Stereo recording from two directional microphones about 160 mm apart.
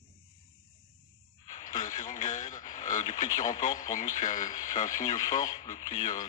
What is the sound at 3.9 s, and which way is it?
Speech, 50° left (ahead or behind).